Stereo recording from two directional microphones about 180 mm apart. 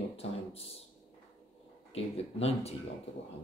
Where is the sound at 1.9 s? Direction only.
35° left (ahead or behind).